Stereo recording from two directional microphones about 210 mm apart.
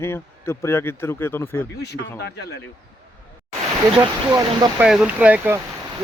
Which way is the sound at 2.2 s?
55° left (ahead or behind).